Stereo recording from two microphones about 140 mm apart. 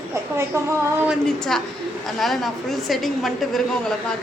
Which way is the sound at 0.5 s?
20° right (ahead or behind).